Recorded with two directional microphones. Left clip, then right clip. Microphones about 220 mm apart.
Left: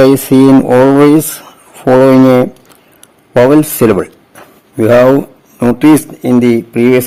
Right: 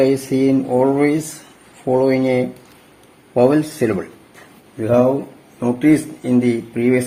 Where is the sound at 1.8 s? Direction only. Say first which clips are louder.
Left 10 dB; 50° left (ahead or behind).